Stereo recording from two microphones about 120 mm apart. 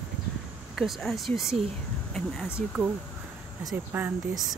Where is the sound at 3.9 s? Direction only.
15° right (ahead or behind).